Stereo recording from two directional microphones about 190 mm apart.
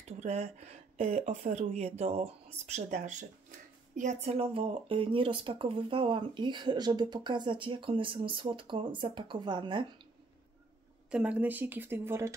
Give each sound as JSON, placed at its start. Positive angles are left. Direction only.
{"t": 0.2, "sound": "speech", "side_deg": -35}
{"t": 11.1, "sound": "speech", "side_deg": -5}